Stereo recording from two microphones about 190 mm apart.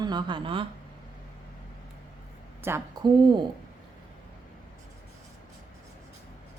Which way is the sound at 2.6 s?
15° right (ahead or behind).